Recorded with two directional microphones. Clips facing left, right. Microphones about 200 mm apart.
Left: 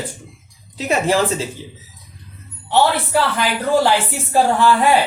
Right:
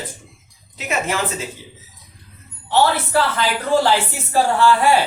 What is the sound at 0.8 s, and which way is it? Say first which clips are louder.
Speech: left 6 dB; 35° left (ahead or behind).